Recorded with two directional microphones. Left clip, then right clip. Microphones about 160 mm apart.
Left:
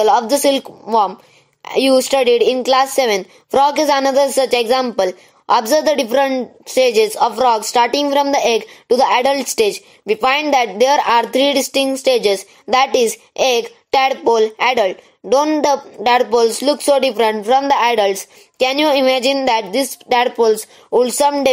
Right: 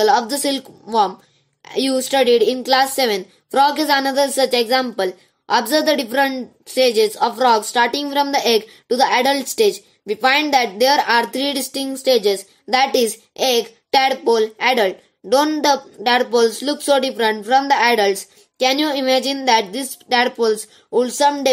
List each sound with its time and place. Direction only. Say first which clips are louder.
0.1 s a woman's voice: left 4 dB; 5° left (ahead or behind)